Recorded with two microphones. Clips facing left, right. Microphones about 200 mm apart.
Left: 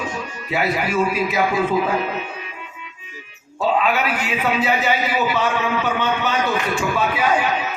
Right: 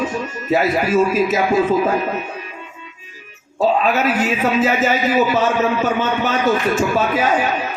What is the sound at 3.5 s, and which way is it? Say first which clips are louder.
Speech: right 3 dB; 40° right (ahead or behind).